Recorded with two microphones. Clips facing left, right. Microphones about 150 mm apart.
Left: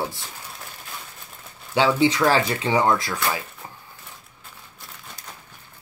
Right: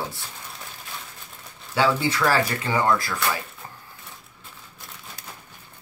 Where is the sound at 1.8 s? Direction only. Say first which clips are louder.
Left 3 dB; 20° left (ahead or behind).